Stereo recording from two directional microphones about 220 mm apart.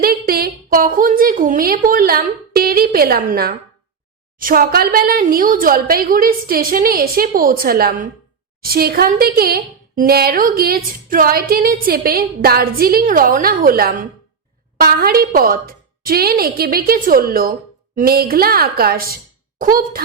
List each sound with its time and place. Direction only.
0.0 s a woman's voice: 45° right (ahead or behind)